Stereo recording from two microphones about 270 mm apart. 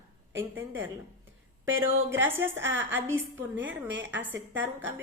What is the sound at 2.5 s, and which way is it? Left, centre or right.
A woman's voice, right.